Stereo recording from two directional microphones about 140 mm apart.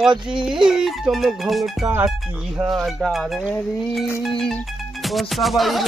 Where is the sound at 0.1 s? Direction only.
35° right (ahead or behind).